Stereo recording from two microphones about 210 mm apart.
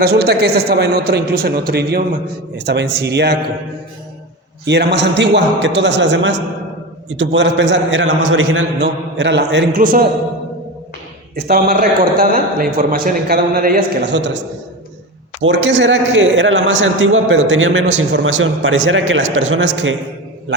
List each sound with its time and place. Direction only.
0.0 s a man's voice: 50° right (ahead or behind)
4.6 s a man's voice: 55° right (ahead or behind)
11.3 s a man's voice: 50° right (ahead or behind)
15.4 s a man's voice: 60° right (ahead or behind)